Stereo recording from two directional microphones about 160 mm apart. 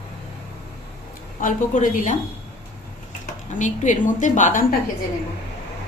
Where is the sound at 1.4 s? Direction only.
55° left (ahead or behind).